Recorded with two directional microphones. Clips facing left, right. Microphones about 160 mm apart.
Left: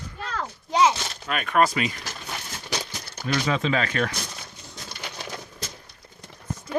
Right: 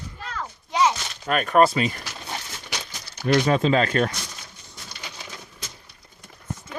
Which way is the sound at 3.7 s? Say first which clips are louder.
Right 4 dB; 35° right (ahead or behind).